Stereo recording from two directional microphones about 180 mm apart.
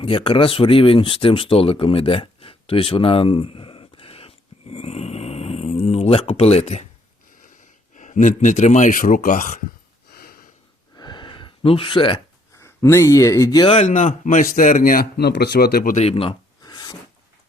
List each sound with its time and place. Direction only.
0.0 s speech: 30° left (ahead or behind)
7.9 s speech: 45° left (ahead or behind)
10.1 s sniff: 55° left (ahead or behind)
10.9 s gasp: 25° left (ahead or behind)
12.5 s speech: 15° left (ahead or behind)
13.7 s speech: 40° left (ahead or behind)
15.3 s speech: 65° left (ahead or behind)
16.0 s a sound: 35° left (ahead or behind)